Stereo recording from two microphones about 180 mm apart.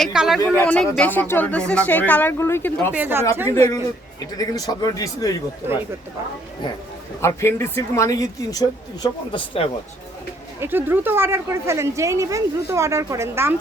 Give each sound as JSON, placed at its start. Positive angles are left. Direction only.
{"t": 0.0, "sound": "speech", "side_deg": 0}
{"t": 2.9, "sound": "a woman's voice", "side_deg": -10}
{"t": 3.5, "sound": "a man's voice", "side_deg": 15}
{"t": 7.2, "sound": "speech", "side_deg": 15}
{"t": 10.6, "sound": "a woman's voice", "side_deg": -10}